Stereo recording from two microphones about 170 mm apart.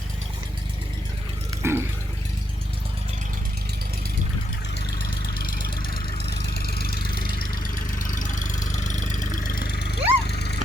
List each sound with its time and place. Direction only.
1.6 s dog: 15° right (ahead or behind)
5.2 s vehicle: 65° left (ahead or behind)
7.9 s vehicle: 50° left (ahead or behind); by 10.6 s 75° left (ahead or behind)